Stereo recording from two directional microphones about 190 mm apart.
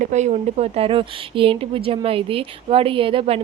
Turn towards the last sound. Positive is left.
turn(degrees=-30)  # may be behind; listen again after turning